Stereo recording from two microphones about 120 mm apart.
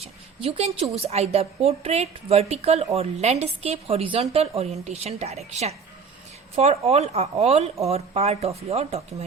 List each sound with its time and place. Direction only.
0.4 s a woman's voice: 55° right (ahead or behind)